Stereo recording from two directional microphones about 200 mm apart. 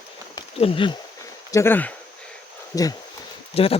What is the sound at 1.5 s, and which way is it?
Speech, 15° left (ahead or behind).